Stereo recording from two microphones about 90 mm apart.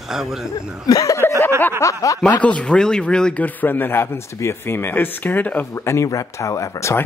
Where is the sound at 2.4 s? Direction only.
15° left (ahead or behind).